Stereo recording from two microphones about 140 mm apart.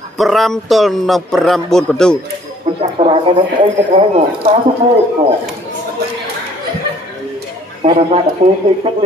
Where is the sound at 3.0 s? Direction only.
45° right (ahead or behind).